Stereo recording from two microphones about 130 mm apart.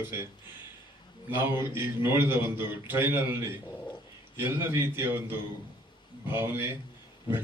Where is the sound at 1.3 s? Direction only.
15° right (ahead or behind).